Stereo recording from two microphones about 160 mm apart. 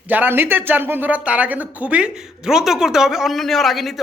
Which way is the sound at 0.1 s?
10° right (ahead or behind).